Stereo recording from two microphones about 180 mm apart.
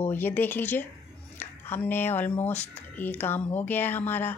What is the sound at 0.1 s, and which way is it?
A woman's voice, 10° left (ahead or behind).